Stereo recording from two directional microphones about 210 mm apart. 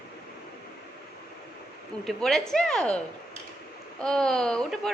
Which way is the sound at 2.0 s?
Centre (ahead or behind).